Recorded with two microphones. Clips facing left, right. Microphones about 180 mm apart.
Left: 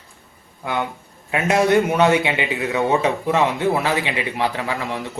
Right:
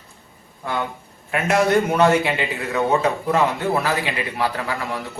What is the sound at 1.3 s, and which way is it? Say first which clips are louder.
A man's voice: left 1 dB; 20° left (ahead or behind).